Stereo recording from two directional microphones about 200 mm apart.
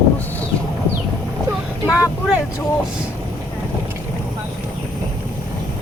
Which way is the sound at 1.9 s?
5° right (ahead or behind).